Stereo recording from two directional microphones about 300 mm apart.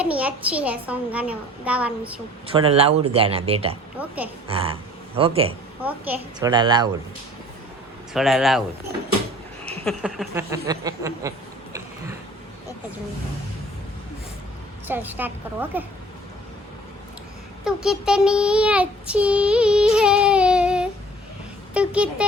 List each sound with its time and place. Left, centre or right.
0.0 s a child's voice: centre
2.5 s a child's voice: centre
8.1 s a child's voice: centre
9.8 s a sound: centre
14.8 s a child's voice: centre
17.6 s child singing: centre
21.7 s a child's voice: centre